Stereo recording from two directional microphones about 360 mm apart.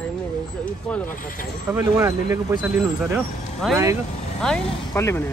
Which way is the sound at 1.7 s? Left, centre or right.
Centre.